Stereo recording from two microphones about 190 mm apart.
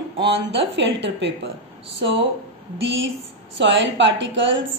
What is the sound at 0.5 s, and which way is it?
Speech, 70° right (ahead or behind).